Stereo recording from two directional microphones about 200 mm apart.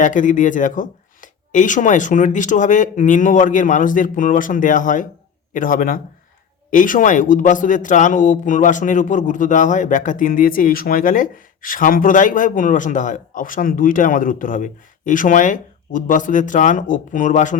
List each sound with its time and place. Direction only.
0.0 s a man's voice: 40° left (ahead or behind)